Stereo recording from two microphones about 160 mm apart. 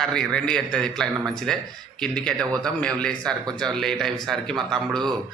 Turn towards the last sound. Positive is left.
turn(degrees=0)  # may be behind; listen again after turning